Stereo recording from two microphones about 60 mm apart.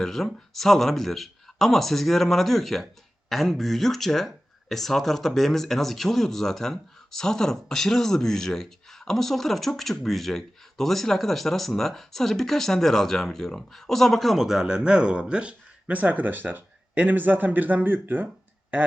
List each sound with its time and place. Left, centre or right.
0.0 s speech: centre; by 18.3 s right